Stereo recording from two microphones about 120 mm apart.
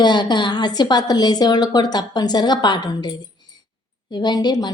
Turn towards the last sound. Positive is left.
turn(degrees=35)  # may be behind; listen again after turning